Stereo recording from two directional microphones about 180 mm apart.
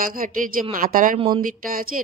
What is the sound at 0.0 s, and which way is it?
Speech, 50° right (ahead or behind).